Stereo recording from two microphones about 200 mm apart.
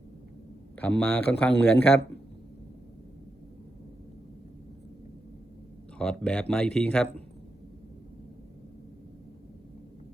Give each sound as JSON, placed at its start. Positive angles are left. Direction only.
{"t": 0.8, "sound": "speech", "side_deg": 10}
{"t": 6.0, "sound": "speech", "side_deg": 5}